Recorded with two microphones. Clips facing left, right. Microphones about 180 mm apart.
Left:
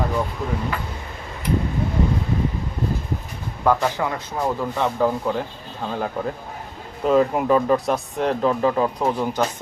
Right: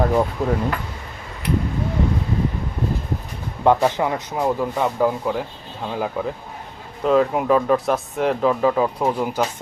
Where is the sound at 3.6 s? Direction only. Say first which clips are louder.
Right 3 dB; 20° right (ahead or behind).